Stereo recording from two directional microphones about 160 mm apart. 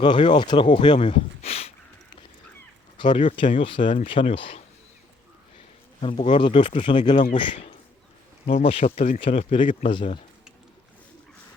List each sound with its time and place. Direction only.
0.0 s speech: 30° left (ahead or behind)
3.0 s speech: 30° left (ahead or behind)
6.0 s speech: 35° left (ahead or behind)